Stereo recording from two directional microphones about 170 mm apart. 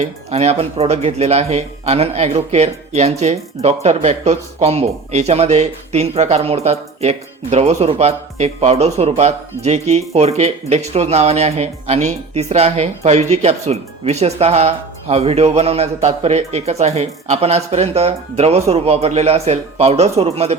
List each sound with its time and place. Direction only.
0.0 s speech: 40° right (ahead or behind)